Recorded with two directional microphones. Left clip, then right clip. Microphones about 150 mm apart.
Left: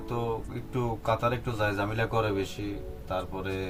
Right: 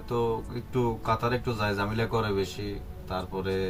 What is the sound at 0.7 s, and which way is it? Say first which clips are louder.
Speech: right 1 dB; 25° left (ahead or behind).